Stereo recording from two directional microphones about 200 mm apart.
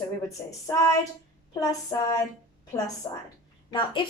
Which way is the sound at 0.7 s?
15° left (ahead or behind).